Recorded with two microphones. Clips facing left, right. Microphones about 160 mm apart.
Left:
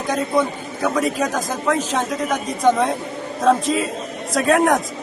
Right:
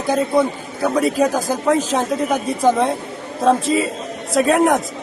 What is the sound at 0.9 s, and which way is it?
A man's voice, 35° right (ahead or behind).